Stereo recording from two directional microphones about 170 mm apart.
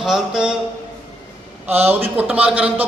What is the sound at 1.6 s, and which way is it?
A man's voice, 10° right (ahead or behind).